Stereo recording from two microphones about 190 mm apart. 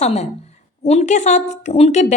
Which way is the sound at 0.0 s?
35° left (ahead or behind).